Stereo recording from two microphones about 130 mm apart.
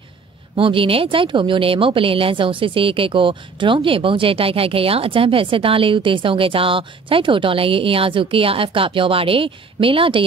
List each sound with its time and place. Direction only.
0.6 s a woman's voice: 45° right (ahead or behind)